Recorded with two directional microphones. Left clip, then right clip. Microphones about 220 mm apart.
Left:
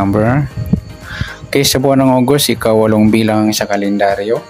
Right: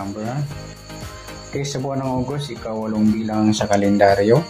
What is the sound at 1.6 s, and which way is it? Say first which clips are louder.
Speech: left 14 dB; 50° left (ahead or behind).